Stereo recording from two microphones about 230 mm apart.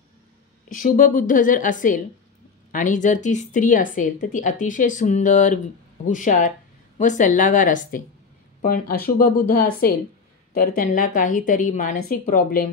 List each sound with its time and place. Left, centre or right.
0.7 s a woman's voice: left